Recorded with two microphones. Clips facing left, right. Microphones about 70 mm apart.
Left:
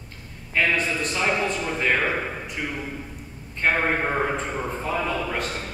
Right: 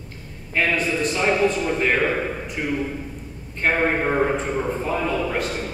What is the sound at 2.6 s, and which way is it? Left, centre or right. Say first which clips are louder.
Speech: right 5 dB; centre.